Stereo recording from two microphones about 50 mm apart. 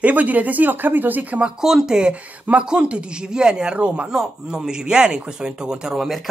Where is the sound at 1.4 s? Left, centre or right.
Centre.